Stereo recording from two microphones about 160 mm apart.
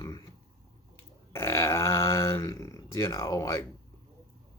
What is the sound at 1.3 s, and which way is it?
Grunt, 15° left (ahead or behind).